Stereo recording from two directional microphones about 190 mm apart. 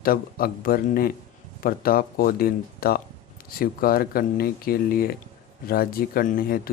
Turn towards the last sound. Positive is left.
turn(degrees=50)  # may be behind; listen again after turning